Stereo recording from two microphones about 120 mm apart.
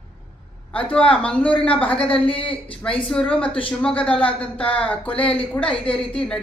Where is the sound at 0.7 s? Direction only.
10° left (ahead or behind).